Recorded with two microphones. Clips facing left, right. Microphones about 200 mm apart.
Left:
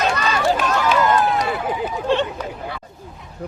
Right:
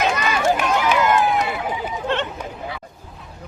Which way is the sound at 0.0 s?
15° right (ahead or behind).